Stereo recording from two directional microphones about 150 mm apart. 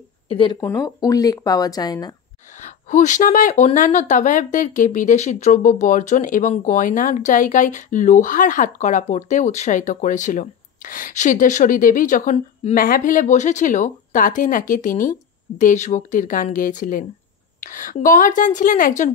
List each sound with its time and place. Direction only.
0.3 s speech: 35° left (ahead or behind)
0.6 s speech: 20° left (ahead or behind)
2.6 s speech: 55° left (ahead or behind)